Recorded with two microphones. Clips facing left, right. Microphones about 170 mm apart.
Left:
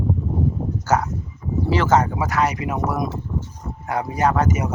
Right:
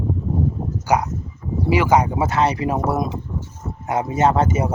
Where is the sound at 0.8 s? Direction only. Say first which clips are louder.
Right 2 dB; 15° right (ahead or behind).